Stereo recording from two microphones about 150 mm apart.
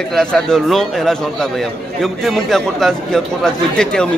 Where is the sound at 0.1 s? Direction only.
5° left (ahead or behind).